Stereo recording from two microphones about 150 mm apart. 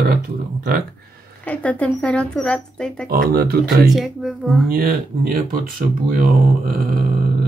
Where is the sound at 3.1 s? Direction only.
90° right.